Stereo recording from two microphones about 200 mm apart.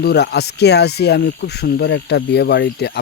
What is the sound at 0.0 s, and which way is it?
Speech, 55° left (ahead or behind).